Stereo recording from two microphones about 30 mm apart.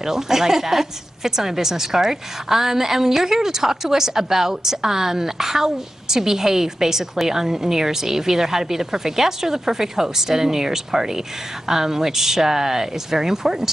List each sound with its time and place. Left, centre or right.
0.0 s a woman's voice: centre